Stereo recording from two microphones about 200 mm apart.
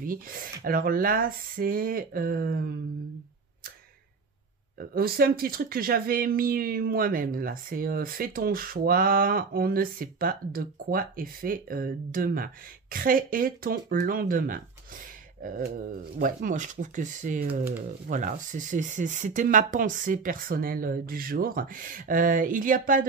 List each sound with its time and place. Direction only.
0.0 s speech: 45° right (ahead or behind)
4.7 s speech: 50° right (ahead or behind)